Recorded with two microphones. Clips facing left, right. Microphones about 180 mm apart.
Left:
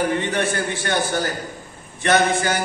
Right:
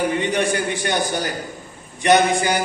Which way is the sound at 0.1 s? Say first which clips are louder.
Right 1 dB; 15° right (ahead or behind).